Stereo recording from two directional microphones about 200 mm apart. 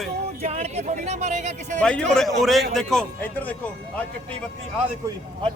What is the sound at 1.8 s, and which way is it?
A man's voice, 5° left (ahead or behind).